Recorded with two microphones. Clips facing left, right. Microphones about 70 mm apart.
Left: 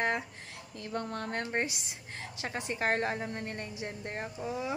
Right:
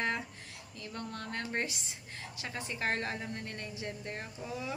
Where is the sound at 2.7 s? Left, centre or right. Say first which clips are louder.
Left 4 dB; left.